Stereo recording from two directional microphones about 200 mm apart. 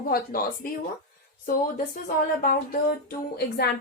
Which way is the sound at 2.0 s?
45° left (ahead or behind).